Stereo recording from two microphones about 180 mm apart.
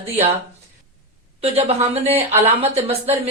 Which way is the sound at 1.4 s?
35° right (ahead or behind).